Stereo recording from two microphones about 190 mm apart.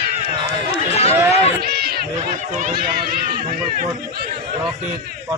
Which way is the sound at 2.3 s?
40° right (ahead or behind).